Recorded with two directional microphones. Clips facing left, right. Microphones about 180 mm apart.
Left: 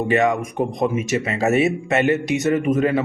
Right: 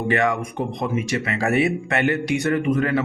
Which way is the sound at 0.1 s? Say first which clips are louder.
Left 2 dB; 20° left (ahead or behind).